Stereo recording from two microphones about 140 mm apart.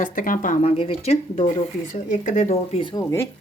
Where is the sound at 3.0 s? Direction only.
20° left (ahead or behind).